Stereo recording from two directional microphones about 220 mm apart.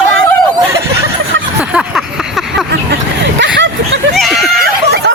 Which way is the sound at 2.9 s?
55° right (ahead or behind).